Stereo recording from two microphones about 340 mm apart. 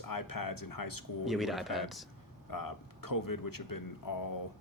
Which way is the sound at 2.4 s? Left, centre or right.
Left.